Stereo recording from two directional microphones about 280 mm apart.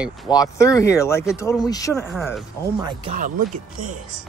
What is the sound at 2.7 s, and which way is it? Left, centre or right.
Speech, centre.